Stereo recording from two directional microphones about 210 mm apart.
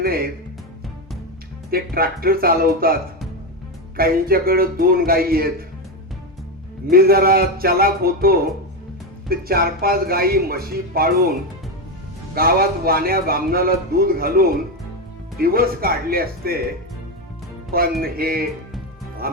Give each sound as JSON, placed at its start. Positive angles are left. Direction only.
{"t": 0.0, "sound": "speech", "side_deg": -45}
{"t": 1.7, "sound": "a man's voice", "side_deg": -45}
{"t": 3.9, "sound": "a man's voice", "side_deg": -45}
{"t": 6.9, "sound": "a man's voice", "side_deg": -45}
{"t": 17.7, "sound": "a man's voice", "side_deg": -45}